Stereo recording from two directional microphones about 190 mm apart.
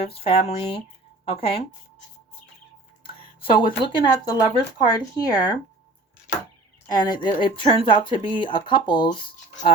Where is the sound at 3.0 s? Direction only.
25° left (ahead or behind).